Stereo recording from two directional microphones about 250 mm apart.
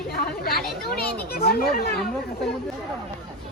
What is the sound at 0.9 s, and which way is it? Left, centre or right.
Speech, left.